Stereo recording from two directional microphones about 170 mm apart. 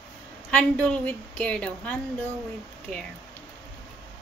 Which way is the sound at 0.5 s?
5° left (ahead or behind).